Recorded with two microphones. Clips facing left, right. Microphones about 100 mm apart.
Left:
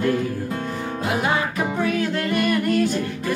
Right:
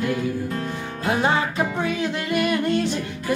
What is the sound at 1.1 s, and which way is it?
Music, 30° right (ahead or behind).